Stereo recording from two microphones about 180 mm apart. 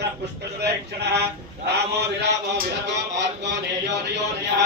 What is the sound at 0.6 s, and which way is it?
A man's voice, 65° right (ahead or behind).